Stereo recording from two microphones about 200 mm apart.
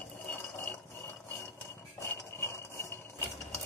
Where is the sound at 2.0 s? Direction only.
10° left (ahead or behind).